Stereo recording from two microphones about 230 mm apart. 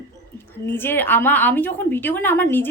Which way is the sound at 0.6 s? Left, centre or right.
Centre.